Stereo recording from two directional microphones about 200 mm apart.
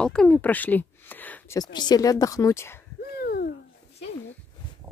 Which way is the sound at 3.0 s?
50° left (ahead or behind).